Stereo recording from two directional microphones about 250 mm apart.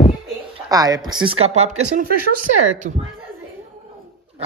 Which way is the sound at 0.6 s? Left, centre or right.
Centre.